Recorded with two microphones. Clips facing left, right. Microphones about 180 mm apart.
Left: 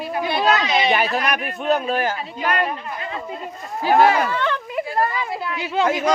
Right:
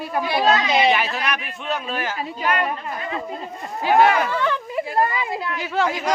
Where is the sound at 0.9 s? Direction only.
40° left (ahead or behind).